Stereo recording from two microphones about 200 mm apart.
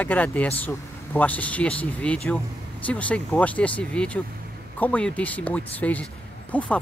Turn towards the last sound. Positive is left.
turn(degrees=5)  # may be behind; listen again after turning